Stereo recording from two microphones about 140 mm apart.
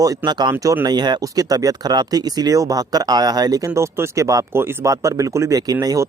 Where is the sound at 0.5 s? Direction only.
20° right (ahead or behind).